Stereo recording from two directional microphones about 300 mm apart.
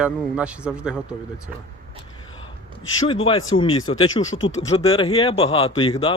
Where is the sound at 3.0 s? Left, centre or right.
Centre.